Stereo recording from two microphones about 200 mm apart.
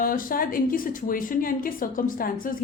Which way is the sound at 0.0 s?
45° left (ahead or behind).